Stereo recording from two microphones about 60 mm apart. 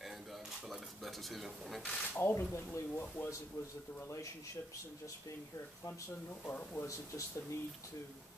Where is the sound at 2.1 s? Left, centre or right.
Left.